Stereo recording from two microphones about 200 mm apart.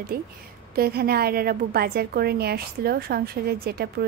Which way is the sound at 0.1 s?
50° right (ahead or behind).